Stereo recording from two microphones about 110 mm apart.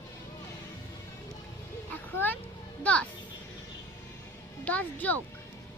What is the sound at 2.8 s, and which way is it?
Speech, 10° left (ahead or behind).